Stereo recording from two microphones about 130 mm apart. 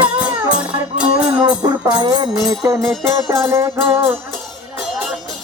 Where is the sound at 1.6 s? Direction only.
30° right (ahead or behind).